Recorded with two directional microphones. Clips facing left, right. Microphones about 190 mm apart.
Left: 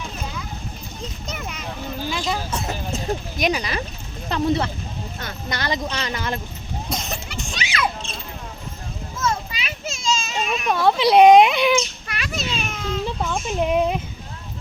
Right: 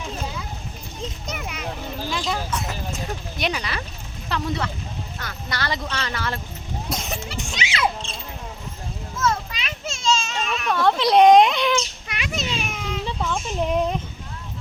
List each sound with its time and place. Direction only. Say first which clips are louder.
1.0 s children playing: right 1 dB; 10° right (ahead or behind)
2.0 s a sound: left 1 dB; centre (ahead or behind)
2.5 s speech: left 2 dB; 25° left (ahead or behind)
3.3 s speech: left 4 dB; 10° left (ahead or behind)
4.3 s speech: left 5 dB; 25° left (ahead or behind)
6.9 s music: left 1 dB; 10° right (ahead or behind)
7.3 s a sound: left 2 dB; 15° right (ahead or behind)
9.5 s children playing: left 1 dB; 5° left (ahead or behind)
12.0 s children playing: even; 20° right (ahead or behind)
13.1 s speech: left 1 dB; 10° left (ahead or behind)